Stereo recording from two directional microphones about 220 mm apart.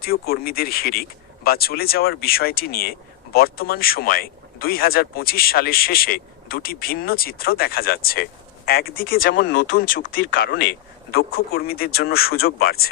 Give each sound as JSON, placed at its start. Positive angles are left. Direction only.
{"t": 0.0, "sound": "speech", "side_deg": 45}